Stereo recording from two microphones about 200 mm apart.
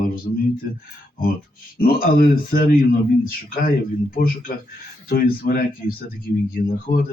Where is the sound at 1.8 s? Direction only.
45° left (ahead or behind).